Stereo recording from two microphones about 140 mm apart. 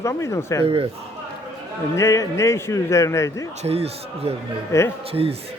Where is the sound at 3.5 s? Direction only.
50° right (ahead or behind).